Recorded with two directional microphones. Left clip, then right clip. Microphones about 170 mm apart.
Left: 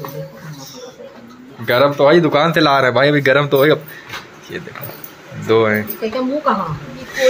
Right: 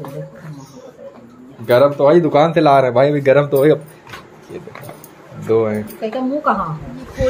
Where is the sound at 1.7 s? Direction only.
Centre (ahead or behind).